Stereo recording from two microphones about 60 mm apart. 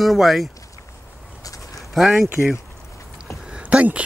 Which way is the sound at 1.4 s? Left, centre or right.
Left.